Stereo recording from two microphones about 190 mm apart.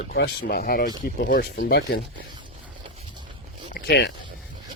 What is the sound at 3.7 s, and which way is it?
Speech, 60° left (ahead or behind).